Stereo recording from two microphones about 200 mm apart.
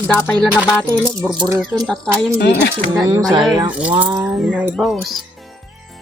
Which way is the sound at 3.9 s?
25° right (ahead or behind).